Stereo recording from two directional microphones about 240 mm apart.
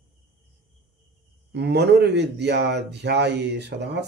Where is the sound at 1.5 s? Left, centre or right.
Right.